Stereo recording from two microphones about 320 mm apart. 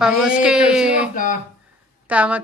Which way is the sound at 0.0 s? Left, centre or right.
Centre.